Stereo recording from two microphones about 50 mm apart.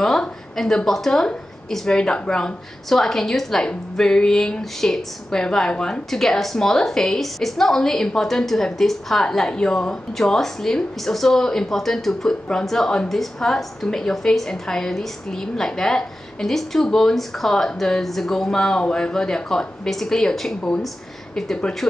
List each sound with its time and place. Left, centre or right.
0.0 s a woman's voice: centre